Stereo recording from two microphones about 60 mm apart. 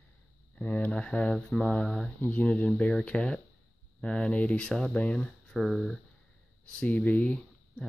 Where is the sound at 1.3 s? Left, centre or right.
Centre.